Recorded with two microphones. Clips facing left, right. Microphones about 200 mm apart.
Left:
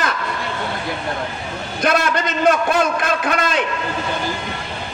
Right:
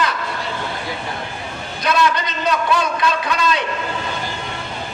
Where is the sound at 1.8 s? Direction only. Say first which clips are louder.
Even; 50° left (ahead or behind).